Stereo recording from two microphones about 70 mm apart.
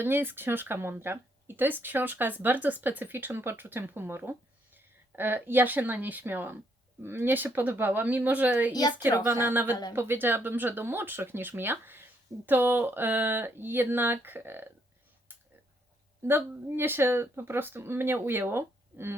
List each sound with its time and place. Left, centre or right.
0.0 s speech: right
8.7 s speech: left
9.4 s speech: right
15.3 s a sound: right
16.2 s speech: right